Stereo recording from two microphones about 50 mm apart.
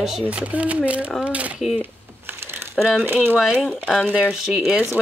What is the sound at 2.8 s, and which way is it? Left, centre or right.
Speech, centre.